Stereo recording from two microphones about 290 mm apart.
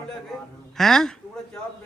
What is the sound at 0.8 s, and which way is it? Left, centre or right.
Speech, centre.